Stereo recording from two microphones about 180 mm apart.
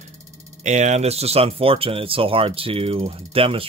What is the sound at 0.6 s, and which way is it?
Speech, 40° right (ahead or behind).